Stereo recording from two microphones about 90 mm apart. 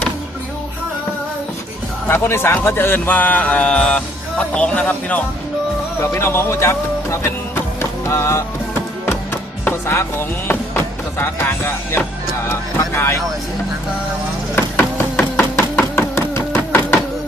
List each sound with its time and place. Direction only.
2.0 s a man's voice: 25° left (ahead or behind)
6.0 s speech: 30° left (ahead or behind)
7.8 s music: 30° left (ahead or behind)
9.8 s speech: 30° left (ahead or behind)
14.5 s a sound: 25° left (ahead or behind)